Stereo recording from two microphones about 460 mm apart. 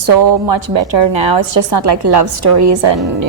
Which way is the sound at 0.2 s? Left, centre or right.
Right.